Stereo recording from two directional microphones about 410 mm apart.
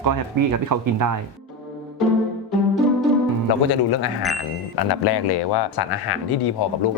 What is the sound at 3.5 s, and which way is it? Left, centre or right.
Speech, left.